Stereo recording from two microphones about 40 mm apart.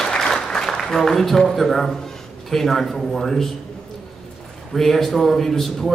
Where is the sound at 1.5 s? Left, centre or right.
Centre.